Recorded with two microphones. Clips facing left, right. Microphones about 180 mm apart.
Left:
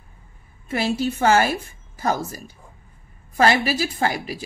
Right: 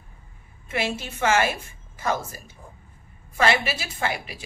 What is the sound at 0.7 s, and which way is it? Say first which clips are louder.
A woman's voice: left 6 dB; 35° left (ahead or behind).